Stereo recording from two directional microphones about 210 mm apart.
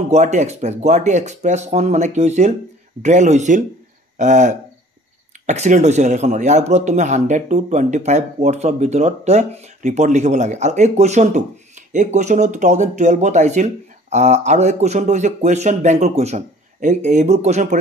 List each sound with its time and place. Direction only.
0.1 s speech: 35° right (ahead or behind)